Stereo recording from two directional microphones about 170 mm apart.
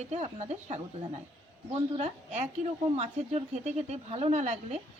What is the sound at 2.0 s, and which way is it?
Speech, 40° right (ahead or behind).